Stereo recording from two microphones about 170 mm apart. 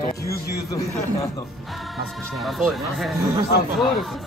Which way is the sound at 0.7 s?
20° left (ahead or behind).